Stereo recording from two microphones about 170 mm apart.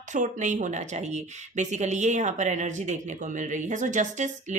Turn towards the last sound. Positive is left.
turn(degrees=-45)  # may be behind; listen again after turning